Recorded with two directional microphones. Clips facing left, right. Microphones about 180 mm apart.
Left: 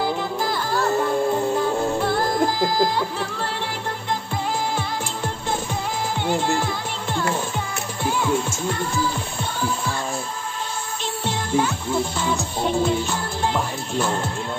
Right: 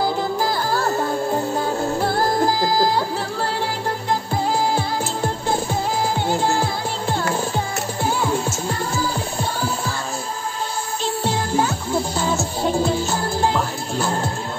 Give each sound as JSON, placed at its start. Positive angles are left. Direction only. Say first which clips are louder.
{"t": 0.0, "sound": "music", "louder": "right 3 dB", "side_deg": -35}
{"t": 2.0, "sound": "music", "louder": "right 2 dB", "side_deg": -35}
{"t": 6.2, "sound": "music", "louder": "left 2 dB", "side_deg": -35}
{"t": 11.2, "sound": "music", "louder": "even", "side_deg": -35}